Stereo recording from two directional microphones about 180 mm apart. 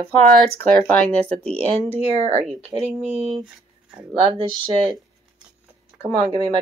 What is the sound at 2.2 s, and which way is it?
Speech, 35° right (ahead or behind).